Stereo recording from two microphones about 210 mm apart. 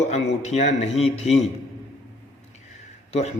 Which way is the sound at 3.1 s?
30° left (ahead or behind).